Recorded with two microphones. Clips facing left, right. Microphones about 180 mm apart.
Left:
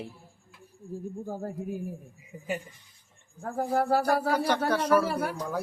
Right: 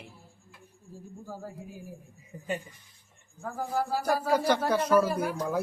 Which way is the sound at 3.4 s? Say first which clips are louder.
Left 4 dB; 60° left (ahead or behind).